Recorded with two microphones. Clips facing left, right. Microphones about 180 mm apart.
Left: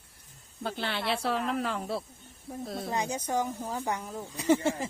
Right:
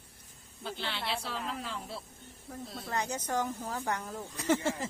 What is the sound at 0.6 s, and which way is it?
Speech, 50° left (ahead or behind).